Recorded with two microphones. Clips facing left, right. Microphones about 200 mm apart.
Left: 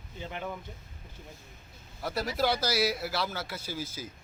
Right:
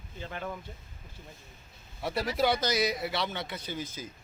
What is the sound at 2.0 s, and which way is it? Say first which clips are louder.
A man's voice: right 1 dB; centre (ahead or behind).